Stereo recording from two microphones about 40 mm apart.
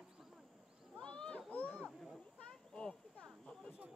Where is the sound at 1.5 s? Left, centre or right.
Left.